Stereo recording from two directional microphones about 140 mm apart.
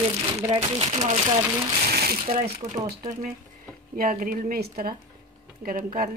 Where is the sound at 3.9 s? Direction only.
80° right.